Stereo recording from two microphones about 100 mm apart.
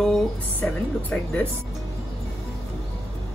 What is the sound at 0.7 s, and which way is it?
Speech, 5° left (ahead or behind).